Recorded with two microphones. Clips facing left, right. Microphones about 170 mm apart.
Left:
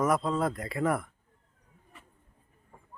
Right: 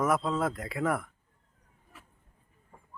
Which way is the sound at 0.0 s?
Centre (ahead or behind).